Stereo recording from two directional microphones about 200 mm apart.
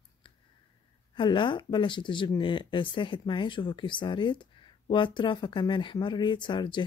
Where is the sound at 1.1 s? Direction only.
25° left (ahead or behind).